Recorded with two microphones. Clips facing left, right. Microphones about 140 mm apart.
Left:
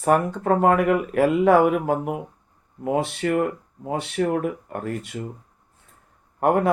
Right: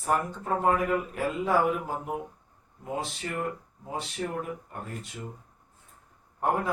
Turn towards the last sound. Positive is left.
turn(degrees=70)  # may be behind; listen again after turning